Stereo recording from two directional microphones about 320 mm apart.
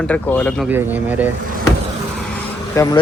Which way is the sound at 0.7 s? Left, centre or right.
Centre.